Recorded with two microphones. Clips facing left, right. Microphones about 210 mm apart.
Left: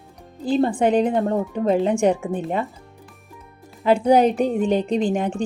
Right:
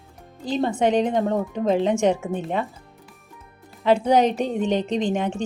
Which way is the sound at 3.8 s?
10° left (ahead or behind).